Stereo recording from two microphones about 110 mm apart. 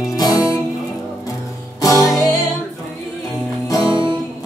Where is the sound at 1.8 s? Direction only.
30° left (ahead or behind).